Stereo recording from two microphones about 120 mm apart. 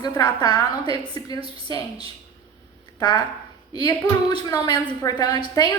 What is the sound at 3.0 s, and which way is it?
A woman's voice, 35° left (ahead or behind).